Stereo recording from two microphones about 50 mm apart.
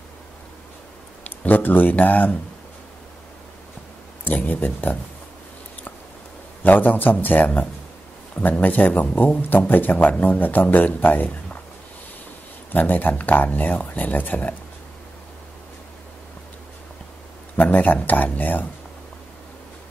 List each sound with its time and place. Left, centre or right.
1.2 s speech: left
4.2 s speech: left
6.6 s speech: left
12.7 s speech: left
17.6 s speech: left